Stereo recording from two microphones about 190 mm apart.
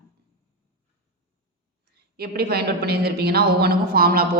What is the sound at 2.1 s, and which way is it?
A woman's voice, 55° right (ahead or behind).